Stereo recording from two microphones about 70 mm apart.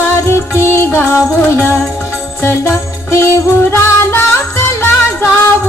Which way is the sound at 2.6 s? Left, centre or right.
Left.